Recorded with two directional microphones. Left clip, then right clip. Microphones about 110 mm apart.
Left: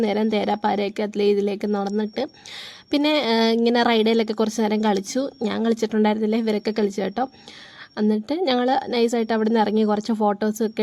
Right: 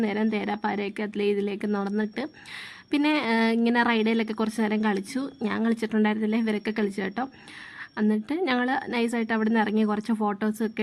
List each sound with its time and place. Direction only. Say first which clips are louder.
0.0 s a woman's voice: left 6 dB; 45° left (ahead or behind); by 10.6 s 30° left (ahead or behind)